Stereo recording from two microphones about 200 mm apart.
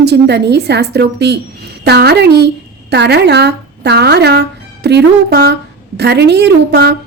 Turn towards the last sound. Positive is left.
turn(degrees=-55)  # may be behind; listen again after turning